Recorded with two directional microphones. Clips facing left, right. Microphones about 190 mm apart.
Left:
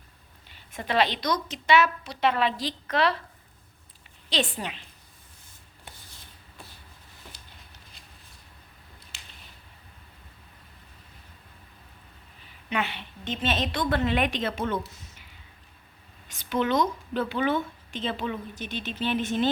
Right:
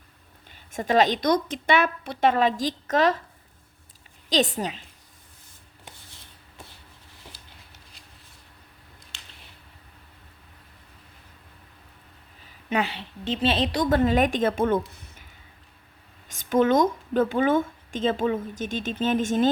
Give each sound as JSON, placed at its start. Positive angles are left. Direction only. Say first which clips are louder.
{"t": 0.4, "sound": "speech", "louder": "right 6 dB", "side_deg": -45}
{"t": 4.3, "sound": "a woman's voice", "louder": "right 5 dB", "side_deg": -40}
{"t": 12.7, "sound": "a woman's voice", "louder": "right 4 dB", "side_deg": -35}
{"t": 16.3, "sound": "speech", "louder": "right 5 dB", "side_deg": -45}